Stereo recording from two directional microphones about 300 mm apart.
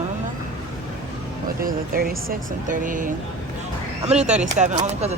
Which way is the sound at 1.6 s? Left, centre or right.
Right.